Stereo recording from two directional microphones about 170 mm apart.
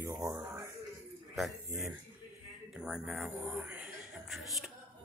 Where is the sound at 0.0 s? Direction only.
20° right (ahead or behind).